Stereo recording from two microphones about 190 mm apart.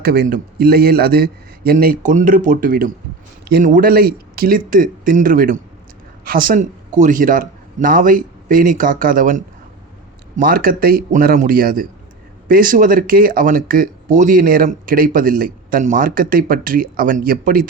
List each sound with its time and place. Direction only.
0.0 s a man's voice: 50° right (ahead or behind)